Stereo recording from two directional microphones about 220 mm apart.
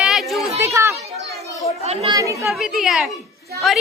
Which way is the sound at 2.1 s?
15° right (ahead or behind).